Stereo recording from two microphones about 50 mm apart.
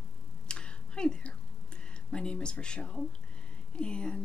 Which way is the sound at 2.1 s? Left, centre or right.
Centre.